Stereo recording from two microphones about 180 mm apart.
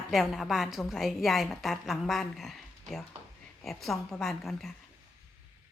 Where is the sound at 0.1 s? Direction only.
Centre (ahead or behind).